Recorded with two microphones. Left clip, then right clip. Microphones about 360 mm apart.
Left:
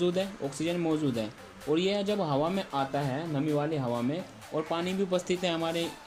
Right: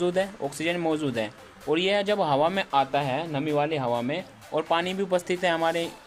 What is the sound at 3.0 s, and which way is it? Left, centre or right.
Speech, right.